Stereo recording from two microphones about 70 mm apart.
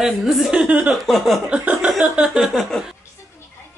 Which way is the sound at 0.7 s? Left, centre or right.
Centre.